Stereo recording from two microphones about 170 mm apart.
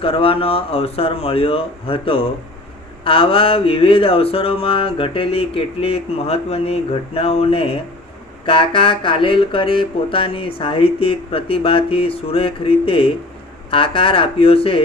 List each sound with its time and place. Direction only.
0.0 s speech: 35° left (ahead or behind)